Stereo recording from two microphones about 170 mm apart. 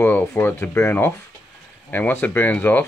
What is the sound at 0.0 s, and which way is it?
Speech, 10° left (ahead or behind).